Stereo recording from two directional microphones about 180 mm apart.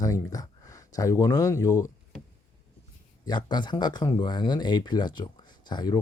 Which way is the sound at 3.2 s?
25° left (ahead or behind).